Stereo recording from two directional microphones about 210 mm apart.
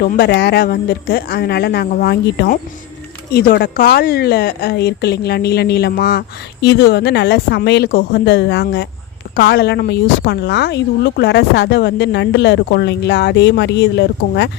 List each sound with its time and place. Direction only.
0.0 s a woman's voice: 50° left (ahead or behind)